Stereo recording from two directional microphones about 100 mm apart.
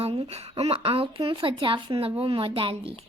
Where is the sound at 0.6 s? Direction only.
75° right (ahead or behind).